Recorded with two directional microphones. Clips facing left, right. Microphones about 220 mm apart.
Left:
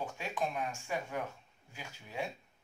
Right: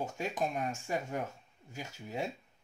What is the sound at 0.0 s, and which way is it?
Speech, 40° right (ahead or behind).